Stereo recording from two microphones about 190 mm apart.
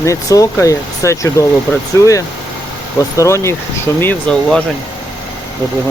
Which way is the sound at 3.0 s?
15° left (ahead or behind).